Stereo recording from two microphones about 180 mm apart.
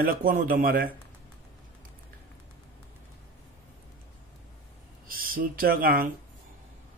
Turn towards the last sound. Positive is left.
turn(degrees=-55)  # may be behind; listen again after turning